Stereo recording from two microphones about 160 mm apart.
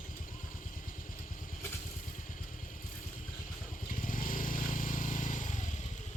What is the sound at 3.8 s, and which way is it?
Vehicle, 60° left (ahead or behind).